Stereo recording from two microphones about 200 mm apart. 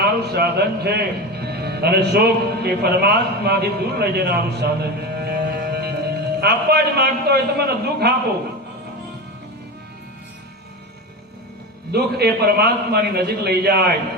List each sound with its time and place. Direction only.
0.0 s a man's voice: 50° right (ahead or behind)
11.9 s a man's voice: 50° right (ahead or behind)